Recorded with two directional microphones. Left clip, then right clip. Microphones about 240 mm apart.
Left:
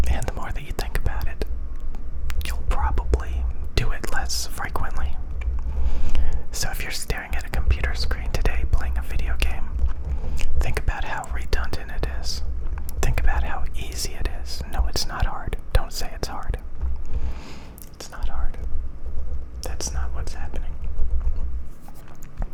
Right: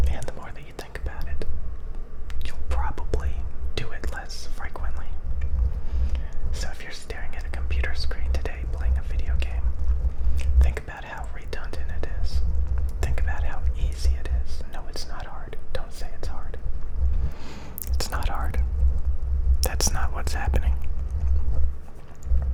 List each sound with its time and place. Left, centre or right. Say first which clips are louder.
0.0 s whispering: left 5 dB; centre
17.2 s a sound: left 2 dB; centre
17.9 s whispering: right 8 dB; right
19.6 s whispering: right 6 dB; centre